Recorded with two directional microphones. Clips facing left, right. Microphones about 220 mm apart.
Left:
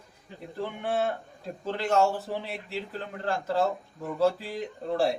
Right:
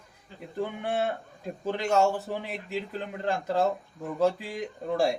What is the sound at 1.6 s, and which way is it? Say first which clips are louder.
A man's voice: even; 15° right (ahead or behind).